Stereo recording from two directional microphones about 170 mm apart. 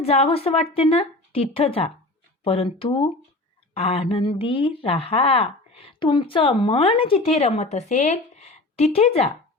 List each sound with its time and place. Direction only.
0.0 s speech: 35° left (ahead or behind)